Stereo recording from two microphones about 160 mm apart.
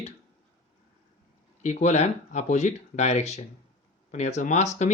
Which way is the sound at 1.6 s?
45° left (ahead or behind).